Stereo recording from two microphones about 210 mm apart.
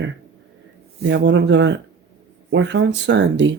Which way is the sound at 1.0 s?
55° right (ahead or behind).